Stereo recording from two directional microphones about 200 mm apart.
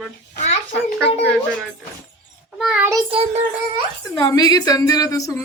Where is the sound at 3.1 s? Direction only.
30° right (ahead or behind).